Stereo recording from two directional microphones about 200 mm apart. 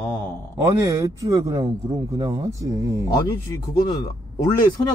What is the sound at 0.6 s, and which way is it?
A man's voice, 15° right (ahead or behind).